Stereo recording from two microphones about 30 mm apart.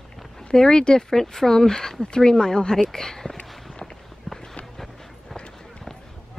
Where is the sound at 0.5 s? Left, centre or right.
Left.